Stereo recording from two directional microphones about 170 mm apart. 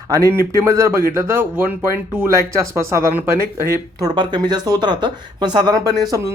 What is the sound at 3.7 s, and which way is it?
Speech, 25° right (ahead or behind).